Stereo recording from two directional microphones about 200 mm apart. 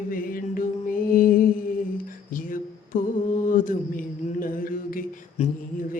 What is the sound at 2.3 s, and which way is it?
Mantra, 40° left (ahead or behind).